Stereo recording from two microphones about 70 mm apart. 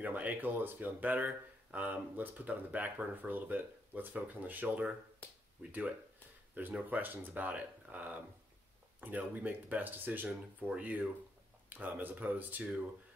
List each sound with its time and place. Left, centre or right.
0.0 s speech: right
5.2 s a sound: left
5.6 s speech: right